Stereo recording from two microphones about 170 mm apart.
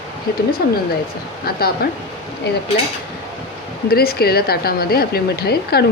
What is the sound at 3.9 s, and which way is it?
Speech, 60° left (ahead or behind).